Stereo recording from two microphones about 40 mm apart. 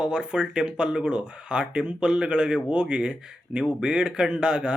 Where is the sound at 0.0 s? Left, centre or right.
Right.